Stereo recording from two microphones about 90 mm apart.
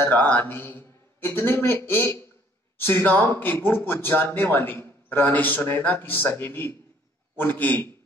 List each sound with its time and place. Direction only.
0.0 s a man's voice: 20° left (ahead or behind)